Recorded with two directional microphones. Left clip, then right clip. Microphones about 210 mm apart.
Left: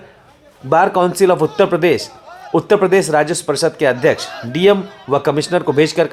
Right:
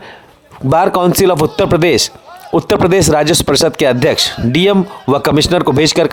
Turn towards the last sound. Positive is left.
turn(degrees=-45)  # may be behind; listen again after turning